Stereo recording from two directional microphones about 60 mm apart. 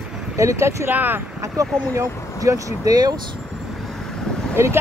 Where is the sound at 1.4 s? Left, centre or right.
Right.